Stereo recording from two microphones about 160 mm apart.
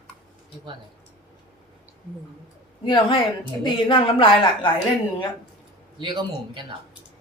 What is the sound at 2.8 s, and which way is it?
A woman's voice, 30° left (ahead or behind).